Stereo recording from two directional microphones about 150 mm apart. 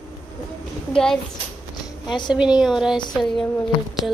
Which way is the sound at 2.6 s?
Centre (ahead or behind).